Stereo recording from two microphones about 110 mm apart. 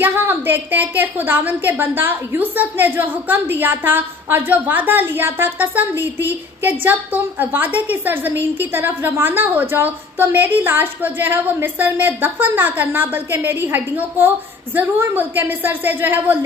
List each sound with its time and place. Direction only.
0.0 s a woman's voice: 15° right (ahead or behind)